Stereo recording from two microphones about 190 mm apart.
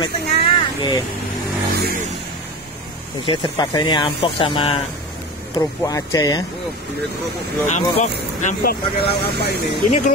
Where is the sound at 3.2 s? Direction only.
25° left (ahead or behind).